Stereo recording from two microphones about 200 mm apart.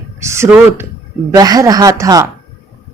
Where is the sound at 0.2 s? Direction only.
15° right (ahead or behind).